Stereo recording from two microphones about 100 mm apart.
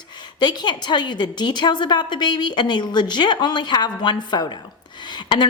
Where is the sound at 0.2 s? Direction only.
50° left (ahead or behind).